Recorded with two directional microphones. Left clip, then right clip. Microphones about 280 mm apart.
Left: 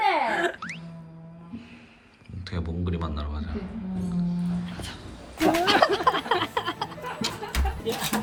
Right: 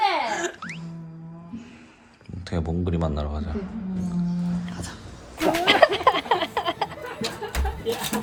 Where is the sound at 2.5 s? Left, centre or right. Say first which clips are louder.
Right 6 dB; right.